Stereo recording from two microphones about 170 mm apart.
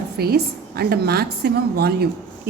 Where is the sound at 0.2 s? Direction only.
70° right (ahead or behind).